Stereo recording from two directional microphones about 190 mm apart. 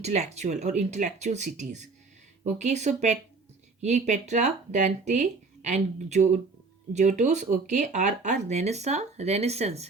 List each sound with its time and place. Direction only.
0.0 s speech: 35° right (ahead or behind)